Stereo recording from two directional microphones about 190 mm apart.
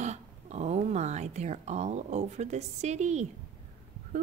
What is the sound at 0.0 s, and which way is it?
A woman's voice, 35° right (ahead or behind).